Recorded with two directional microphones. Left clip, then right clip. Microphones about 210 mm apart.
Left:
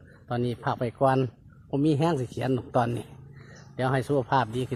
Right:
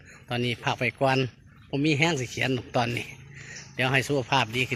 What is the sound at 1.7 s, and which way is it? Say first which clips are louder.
Speech: even; 10° left (ahead or behind).